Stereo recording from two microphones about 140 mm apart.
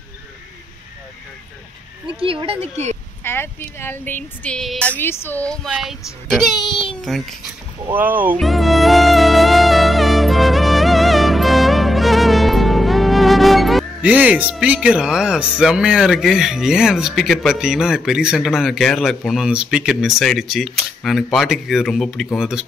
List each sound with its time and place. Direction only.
2.1 s speech: 40° right (ahead or behind)
3.3 s speech: 15° left (ahead or behind)
5.7 s child singing: centre (ahead or behind)
6.9 s a sound: centre (ahead or behind)
7.9 s speech: 10° right (ahead or behind)
8.4 s music: centre (ahead or behind)